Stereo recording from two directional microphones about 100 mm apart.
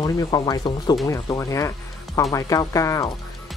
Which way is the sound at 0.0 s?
40° left (ahead or behind).